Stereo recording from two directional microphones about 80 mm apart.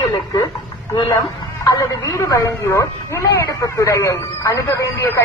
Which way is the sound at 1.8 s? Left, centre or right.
Left.